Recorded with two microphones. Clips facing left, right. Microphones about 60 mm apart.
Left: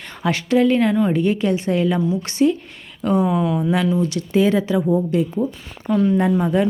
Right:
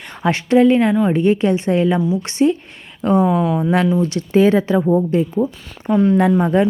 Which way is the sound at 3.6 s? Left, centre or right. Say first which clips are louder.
Right 3 dB; right.